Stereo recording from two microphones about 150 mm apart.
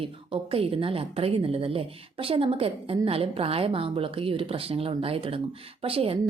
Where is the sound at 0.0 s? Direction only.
40° right (ahead or behind).